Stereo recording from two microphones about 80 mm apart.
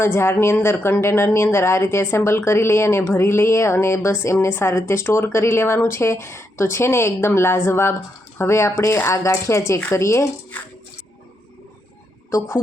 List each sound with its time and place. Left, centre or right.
0.0 s a woman's voice: left